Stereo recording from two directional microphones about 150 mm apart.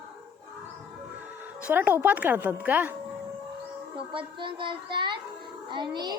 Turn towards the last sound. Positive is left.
turn(degrees=-30)  # may be behind; listen again after turning